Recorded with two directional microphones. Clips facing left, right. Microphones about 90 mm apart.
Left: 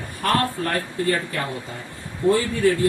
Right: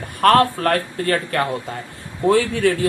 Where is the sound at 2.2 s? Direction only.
90° right.